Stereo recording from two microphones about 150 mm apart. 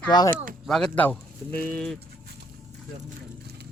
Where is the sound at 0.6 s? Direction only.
5° left (ahead or behind).